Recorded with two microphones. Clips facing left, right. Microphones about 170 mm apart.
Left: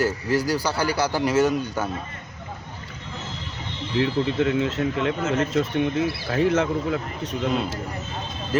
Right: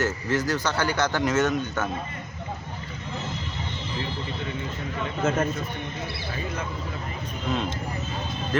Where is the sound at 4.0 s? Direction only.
75° left (ahead or behind).